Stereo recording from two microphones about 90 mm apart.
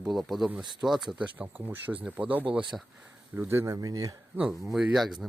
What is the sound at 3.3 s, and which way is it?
Speech, 25° right (ahead or behind).